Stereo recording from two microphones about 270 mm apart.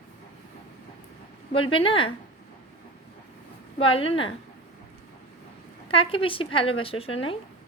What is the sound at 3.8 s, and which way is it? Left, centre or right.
Speech, centre.